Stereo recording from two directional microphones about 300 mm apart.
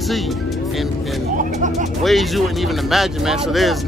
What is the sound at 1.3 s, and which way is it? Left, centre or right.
Music, right.